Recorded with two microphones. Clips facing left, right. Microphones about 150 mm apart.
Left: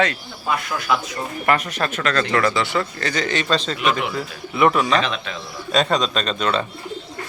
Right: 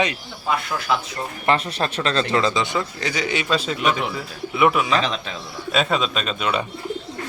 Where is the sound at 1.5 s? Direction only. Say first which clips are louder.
Even; 30° right (ahead or behind); by 6.6 s 10° right (ahead or behind).